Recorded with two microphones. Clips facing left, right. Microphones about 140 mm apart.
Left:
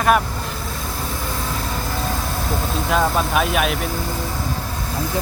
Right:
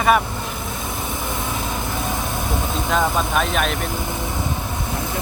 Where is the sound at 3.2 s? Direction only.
5° left (ahead or behind).